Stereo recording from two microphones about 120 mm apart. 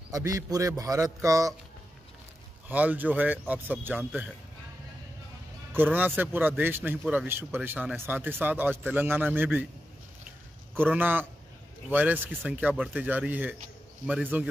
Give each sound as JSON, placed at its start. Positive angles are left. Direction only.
{"t": 0.1, "sound": "a man's voice", "side_deg": -25}
{"t": 2.7, "sound": "speech", "side_deg": -15}
{"t": 5.9, "sound": "speech", "side_deg": -15}
{"t": 10.7, "sound": "a man's voice", "side_deg": -15}